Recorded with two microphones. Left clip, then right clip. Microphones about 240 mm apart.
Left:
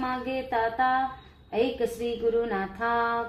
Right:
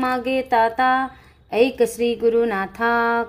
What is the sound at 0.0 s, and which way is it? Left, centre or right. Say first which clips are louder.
Music: right 9 dB; right.